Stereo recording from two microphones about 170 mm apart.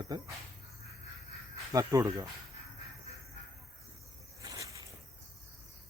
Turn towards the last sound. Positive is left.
turn(degrees=-20)  # may be behind; listen again after turning